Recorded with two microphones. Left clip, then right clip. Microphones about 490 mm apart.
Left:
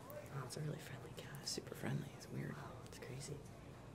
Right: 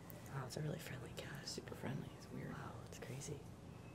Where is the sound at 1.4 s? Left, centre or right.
Centre.